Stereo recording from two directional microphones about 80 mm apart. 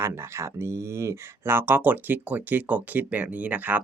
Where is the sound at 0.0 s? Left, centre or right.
Right.